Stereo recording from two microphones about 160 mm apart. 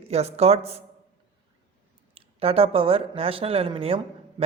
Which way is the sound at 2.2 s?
35° right (ahead or behind).